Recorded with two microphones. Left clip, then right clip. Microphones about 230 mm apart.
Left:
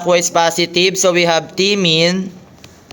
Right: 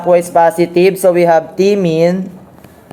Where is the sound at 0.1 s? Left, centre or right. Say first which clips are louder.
Right 4 dB; centre.